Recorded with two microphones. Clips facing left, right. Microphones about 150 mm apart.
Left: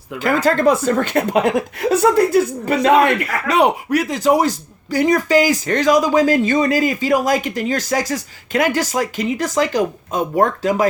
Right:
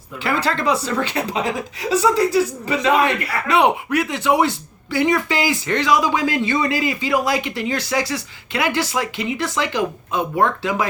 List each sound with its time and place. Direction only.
0.2 s speech: 45° left (ahead or behind)